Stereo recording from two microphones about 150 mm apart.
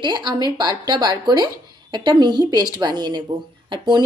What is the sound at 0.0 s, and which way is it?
A woman's voice, 30° right (ahead or behind).